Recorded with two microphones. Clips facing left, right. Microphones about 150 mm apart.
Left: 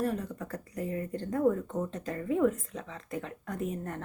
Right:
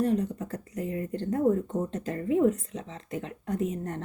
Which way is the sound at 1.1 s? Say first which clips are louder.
Right 3 dB; 30° right (ahead or behind).